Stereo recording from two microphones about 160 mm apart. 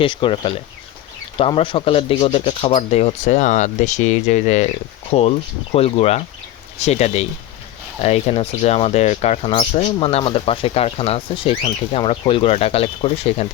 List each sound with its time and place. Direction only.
0.0 s speech: 30° left (ahead or behind)